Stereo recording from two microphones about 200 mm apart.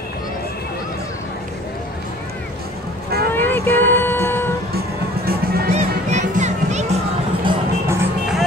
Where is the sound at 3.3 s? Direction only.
10° left (ahead or behind).